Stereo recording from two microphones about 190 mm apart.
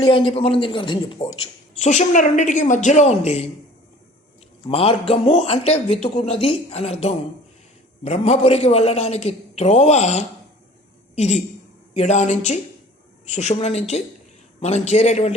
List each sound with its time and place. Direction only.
0.0 s a woman's voice: 25° left (ahead or behind)
4.7 s a woman's voice: 30° left (ahead or behind)